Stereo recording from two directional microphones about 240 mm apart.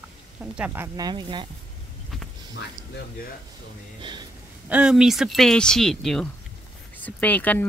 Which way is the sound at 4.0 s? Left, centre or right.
Centre.